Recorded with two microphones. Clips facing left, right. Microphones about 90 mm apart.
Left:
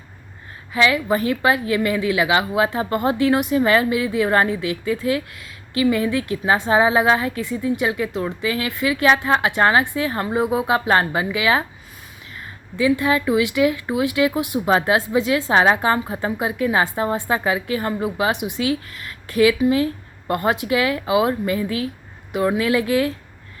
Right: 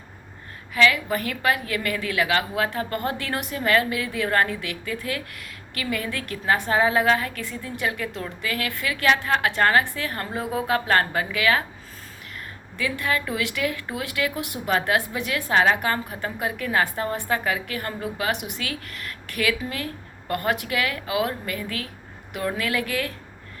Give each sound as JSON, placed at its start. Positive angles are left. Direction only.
{"t": 0.7, "sound": "a woman's voice", "side_deg": 25}
{"t": 12.7, "sound": "a woman's voice", "side_deg": 20}